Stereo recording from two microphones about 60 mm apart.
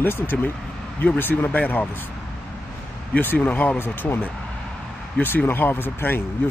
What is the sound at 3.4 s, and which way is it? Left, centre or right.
Speech, left.